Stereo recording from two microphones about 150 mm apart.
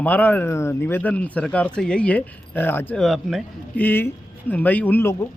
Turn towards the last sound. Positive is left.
turn(degrees=15)  # may be behind; listen again after turning